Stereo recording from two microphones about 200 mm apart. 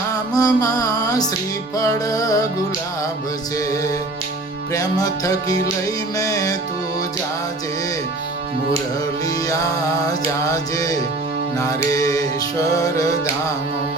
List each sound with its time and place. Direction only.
0.1 s music: 20° left (ahead or behind)
4.7 s music: 15° left (ahead or behind)
9.5 s music: 15° left (ahead or behind)